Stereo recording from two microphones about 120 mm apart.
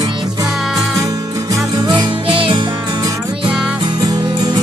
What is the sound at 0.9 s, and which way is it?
Music, 25° right (ahead or behind).